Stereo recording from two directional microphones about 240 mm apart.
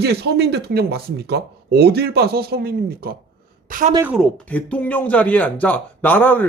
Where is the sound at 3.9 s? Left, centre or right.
Centre.